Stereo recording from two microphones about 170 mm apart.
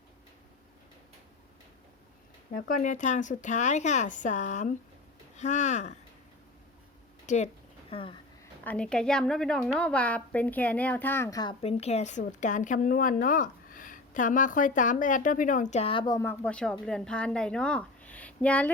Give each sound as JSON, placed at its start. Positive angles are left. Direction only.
{"t": 2.5, "sound": "speech", "side_deg": 55}
{"t": 7.3, "sound": "a sound", "side_deg": 45}
{"t": 8.6, "sound": "a woman's voice", "side_deg": 5}
{"t": 11.6, "sound": "speech", "side_deg": 40}
{"t": 16.2, "sound": "speech", "side_deg": 10}